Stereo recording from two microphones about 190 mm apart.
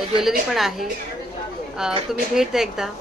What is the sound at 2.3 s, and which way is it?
Speech, centre (ahead or behind).